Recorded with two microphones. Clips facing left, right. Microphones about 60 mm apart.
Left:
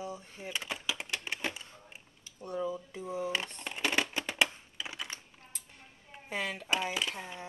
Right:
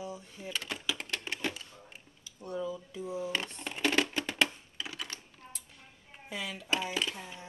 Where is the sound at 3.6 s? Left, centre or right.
Centre.